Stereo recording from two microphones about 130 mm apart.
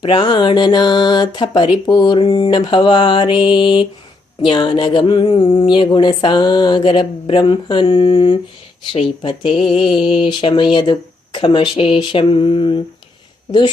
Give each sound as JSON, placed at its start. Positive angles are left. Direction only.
{"t": 0.0, "sound": "speech", "side_deg": 40}